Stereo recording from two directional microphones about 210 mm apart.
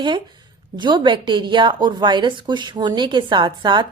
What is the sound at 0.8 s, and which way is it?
A woman's voice, 20° right (ahead or behind).